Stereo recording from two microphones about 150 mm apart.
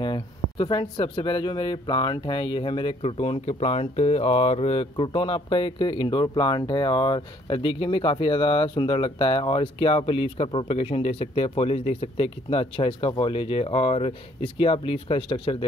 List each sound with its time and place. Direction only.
0.0 s speech: 30° left (ahead or behind)